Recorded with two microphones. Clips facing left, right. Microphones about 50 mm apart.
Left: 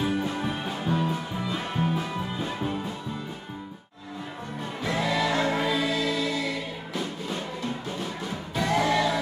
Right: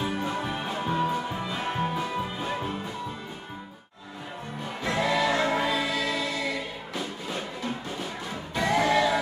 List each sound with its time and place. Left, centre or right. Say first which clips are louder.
0.0 s music: left 2 dB; centre
4.8 s music: right 1 dB; centre
8.5 s music: right 1 dB; centre